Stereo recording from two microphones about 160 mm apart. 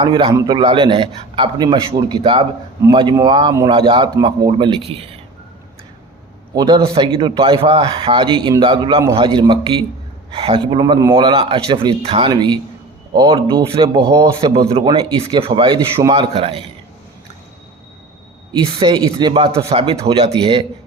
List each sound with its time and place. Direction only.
0.0 s a man's voice: 30° right (ahead or behind)
6.6 s a man's voice: 30° right (ahead or behind)
18.5 s a man's voice: 30° right (ahead or behind)